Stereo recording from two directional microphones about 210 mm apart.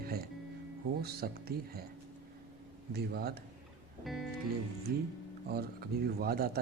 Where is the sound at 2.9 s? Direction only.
50° right (ahead or behind).